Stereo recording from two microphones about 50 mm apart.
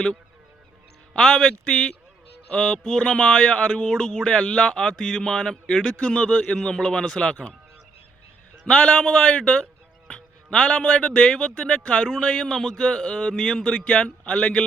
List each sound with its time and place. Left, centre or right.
1.1 s speech: centre
1.6 s a man's voice: left
8.6 s a man's voice: left
12.5 s speech: centre